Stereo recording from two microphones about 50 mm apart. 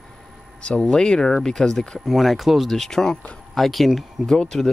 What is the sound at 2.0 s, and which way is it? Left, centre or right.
Speech, centre.